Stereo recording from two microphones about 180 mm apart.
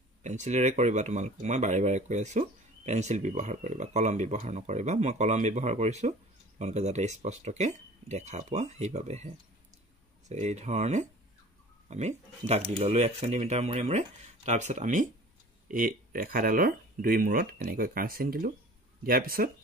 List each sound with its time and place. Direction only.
0.2 s speech: 40° right (ahead or behind)